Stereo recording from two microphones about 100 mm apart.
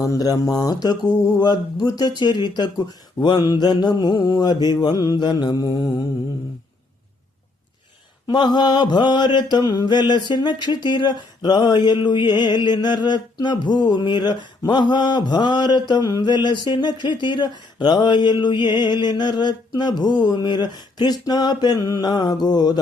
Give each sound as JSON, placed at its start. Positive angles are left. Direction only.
{"t": 0.0, "sound": "mantra", "side_deg": 40}
{"t": 8.3, "sound": "mantra", "side_deg": 45}